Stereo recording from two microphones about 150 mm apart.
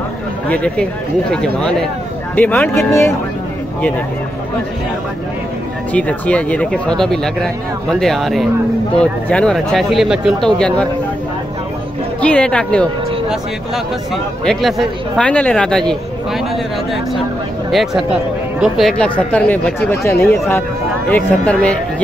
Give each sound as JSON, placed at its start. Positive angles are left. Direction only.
{"t": 0.5, "sound": "speech", "side_deg": 10}
{"t": 5.9, "sound": "speech", "side_deg": 10}
{"t": 12.2, "sound": "speech", "side_deg": 10}
{"t": 14.1, "sound": "speech", "side_deg": 0}
{"t": 17.6, "sound": "speech", "side_deg": 0}